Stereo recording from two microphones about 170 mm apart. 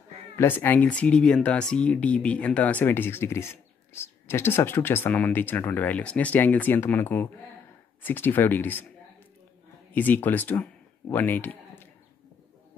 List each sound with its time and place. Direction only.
0.4 s speech: 15° left (ahead or behind)
9.9 s speech: 10° left (ahead or behind)